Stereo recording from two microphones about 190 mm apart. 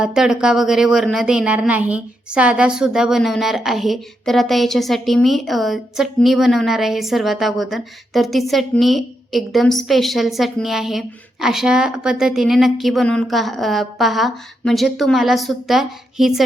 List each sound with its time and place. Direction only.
0.0 s a woman's voice: 5° right (ahead or behind)